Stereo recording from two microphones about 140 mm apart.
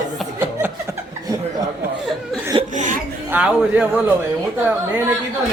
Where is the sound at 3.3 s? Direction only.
10° right (ahead or behind).